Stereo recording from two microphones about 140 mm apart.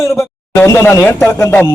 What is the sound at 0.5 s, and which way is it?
Speech, 20° left (ahead or behind).